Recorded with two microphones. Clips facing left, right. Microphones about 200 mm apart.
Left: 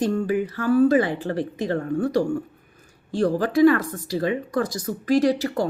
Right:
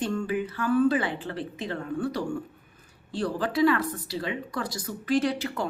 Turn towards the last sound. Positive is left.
turn(degrees=40)  # may be behind; listen again after turning